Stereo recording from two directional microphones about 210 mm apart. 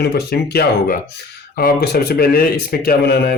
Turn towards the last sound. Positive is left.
turn(degrees=45)  # may be behind; listen again after turning